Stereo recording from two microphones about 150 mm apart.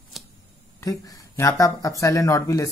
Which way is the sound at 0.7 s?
25° left (ahead or behind).